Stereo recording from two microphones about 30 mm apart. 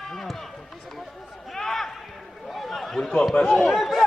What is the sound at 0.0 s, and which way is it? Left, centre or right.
Run, centre.